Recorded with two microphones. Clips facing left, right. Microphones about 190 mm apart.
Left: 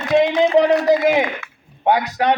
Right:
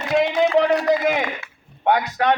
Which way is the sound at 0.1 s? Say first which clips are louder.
Left 3 dB; 20° left (ahead or behind).